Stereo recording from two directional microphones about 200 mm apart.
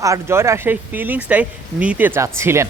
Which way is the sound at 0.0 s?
15° right (ahead or behind).